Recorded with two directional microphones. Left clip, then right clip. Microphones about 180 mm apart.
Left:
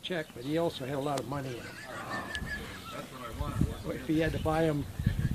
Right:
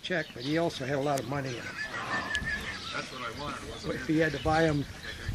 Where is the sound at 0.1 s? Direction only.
40° right (ahead or behind).